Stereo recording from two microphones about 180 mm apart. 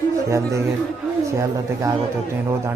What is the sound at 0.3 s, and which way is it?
Speech, 15° right (ahead or behind).